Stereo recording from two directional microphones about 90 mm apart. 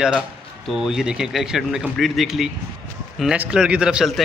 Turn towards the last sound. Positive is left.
turn(degrees=-10)  # may be behind; listen again after turning